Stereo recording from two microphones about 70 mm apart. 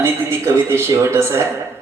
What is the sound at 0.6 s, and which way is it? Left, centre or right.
Speech, right.